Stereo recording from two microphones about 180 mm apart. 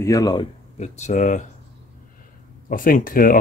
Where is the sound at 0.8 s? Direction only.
40° left (ahead or behind).